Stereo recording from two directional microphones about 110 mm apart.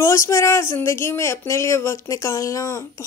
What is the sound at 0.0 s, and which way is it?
Speech, 25° left (ahead or behind).